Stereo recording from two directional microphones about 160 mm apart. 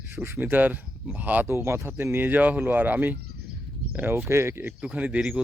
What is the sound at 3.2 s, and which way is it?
Bird, 85° right.